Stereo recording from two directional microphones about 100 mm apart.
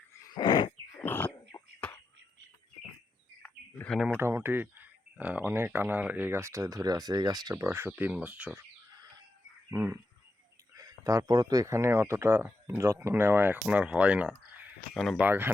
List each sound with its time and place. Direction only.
0.3 s wild animals: 50° left (ahead or behind)
1.0 s a sound: 20° left (ahead or behind)
1.5 s a sound: 40° left (ahead or behind)
4.2 s speech: 25° right (ahead or behind); by 7.5 s 40° right (ahead or behind)
7.5 s speech: 25° right (ahead or behind)
9.6 s speech: 25° right (ahead or behind)
10.8 s speech: 35° right (ahead or behind); by 14.3 s 10° right (ahead or behind)
14.9 s speech: 5° left (ahead or behind)
15.2 s speech: 20° right (ahead or behind)